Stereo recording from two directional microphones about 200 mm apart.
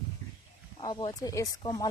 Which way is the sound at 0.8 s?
20° left (ahead or behind).